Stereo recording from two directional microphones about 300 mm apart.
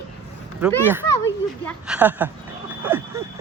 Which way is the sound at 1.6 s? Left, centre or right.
Centre.